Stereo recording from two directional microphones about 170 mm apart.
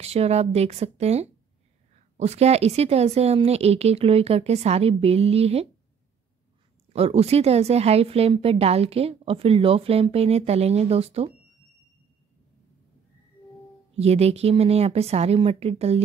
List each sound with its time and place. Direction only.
0.0 s speech: 40° right (ahead or behind)
6.9 s speech: 35° right (ahead or behind)
13.9 s speech: 40° right (ahead or behind)